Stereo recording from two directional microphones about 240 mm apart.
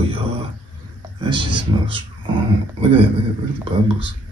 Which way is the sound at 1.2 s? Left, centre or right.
Centre.